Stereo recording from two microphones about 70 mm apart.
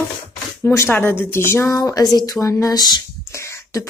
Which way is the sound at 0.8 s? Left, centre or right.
Left.